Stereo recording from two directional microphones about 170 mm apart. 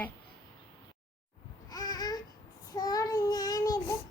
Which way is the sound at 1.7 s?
25° left (ahead or behind).